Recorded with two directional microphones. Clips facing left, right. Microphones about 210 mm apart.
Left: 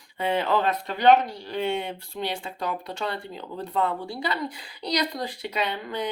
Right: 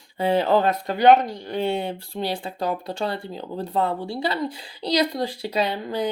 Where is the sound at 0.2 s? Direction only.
35° right (ahead or behind).